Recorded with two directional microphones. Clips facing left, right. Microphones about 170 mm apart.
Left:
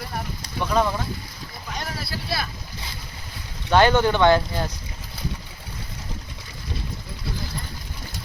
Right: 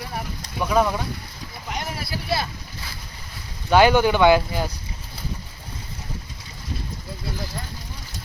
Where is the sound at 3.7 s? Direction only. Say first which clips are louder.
Right 2 dB; 5° right (ahead or behind).